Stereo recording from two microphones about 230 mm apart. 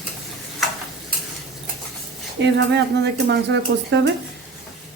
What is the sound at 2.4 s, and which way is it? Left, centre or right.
Speech, right.